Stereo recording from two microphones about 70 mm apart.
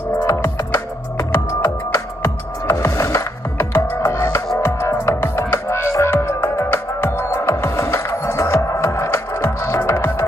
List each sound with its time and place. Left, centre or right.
0.4 s music: left